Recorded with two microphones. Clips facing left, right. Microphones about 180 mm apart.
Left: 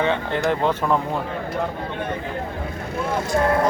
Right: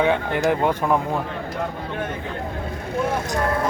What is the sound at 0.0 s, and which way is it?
Speech, 10° right (ahead or behind).